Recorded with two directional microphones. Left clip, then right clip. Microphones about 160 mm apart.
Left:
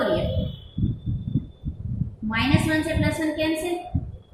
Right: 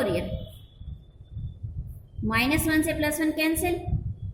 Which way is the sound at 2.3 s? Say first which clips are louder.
Left 1 dB; 40° right (ahead or behind).